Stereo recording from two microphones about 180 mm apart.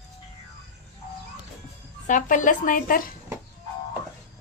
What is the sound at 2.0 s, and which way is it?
A woman's voice, 45° left (ahead or behind).